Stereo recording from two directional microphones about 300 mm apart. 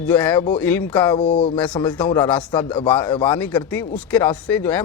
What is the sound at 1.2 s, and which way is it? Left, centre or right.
Speech, centre.